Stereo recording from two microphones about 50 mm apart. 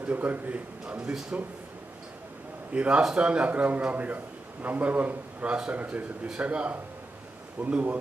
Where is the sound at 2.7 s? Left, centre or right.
Right.